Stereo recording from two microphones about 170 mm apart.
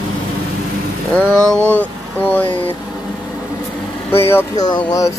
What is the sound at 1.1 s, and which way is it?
Speech, 10° left (ahead or behind).